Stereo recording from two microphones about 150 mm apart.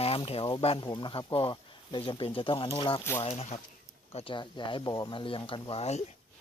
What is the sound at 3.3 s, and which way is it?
Speech, 45° left (ahead or behind).